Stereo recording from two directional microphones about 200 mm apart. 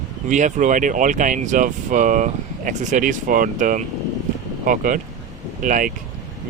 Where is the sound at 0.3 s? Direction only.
40° right (ahead or behind).